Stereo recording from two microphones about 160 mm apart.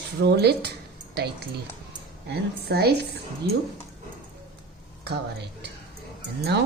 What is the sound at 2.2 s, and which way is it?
Speech, 90° right.